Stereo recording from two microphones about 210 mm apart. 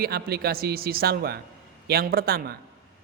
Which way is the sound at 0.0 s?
50° right (ahead or behind).